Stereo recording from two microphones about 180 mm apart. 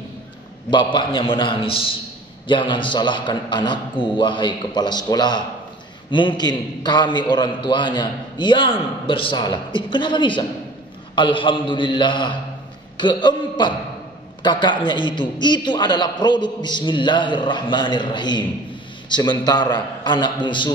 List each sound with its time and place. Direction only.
0.9 s a man's voice: 30° left (ahead or behind)